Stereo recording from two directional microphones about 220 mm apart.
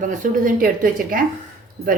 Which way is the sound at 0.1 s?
35° right (ahead or behind).